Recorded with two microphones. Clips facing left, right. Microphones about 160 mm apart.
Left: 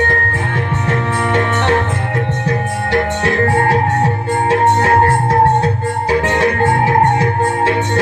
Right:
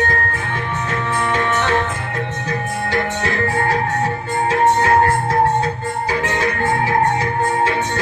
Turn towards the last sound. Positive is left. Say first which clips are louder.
# left 4 dB
turn(degrees=60)  # may be behind; listen again after turning